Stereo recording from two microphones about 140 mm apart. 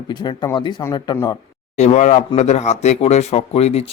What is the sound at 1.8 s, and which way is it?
Speech, 55° left (ahead or behind).